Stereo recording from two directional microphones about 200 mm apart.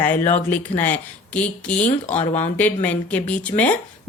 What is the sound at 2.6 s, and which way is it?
Speech, 10° left (ahead or behind).